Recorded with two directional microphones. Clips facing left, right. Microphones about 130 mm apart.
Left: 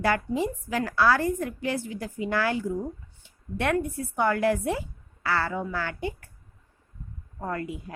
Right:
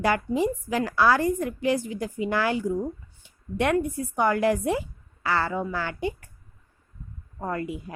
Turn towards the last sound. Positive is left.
turn(degrees=-15)  # may be behind; listen again after turning